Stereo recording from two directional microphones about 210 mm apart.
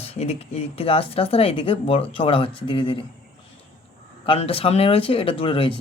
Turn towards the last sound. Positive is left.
turn(degrees=25)  # may be behind; listen again after turning